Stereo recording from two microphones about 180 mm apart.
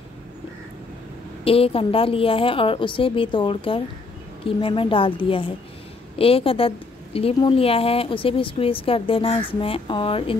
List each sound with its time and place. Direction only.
1.4 s a woman's voice: 30° left (ahead or behind)